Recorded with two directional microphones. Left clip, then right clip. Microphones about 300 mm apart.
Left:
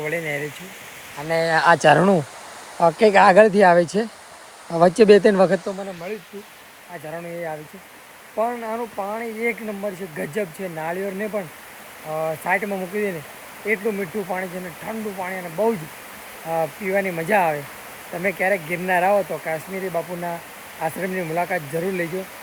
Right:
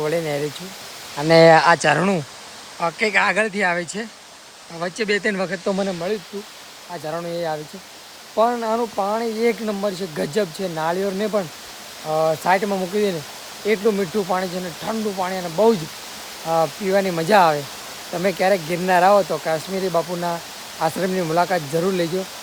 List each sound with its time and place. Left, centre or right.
0.0 s speech: centre
1.5 s speech: centre
7.1 s speech: centre